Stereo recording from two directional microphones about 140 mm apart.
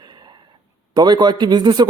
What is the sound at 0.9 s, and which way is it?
Speech, 30° right (ahead or behind).